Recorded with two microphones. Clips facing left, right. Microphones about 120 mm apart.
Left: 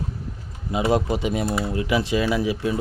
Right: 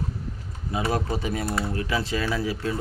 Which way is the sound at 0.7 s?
20° left (ahead or behind).